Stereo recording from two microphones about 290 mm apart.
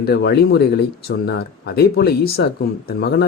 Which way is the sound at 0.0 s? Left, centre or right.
Left.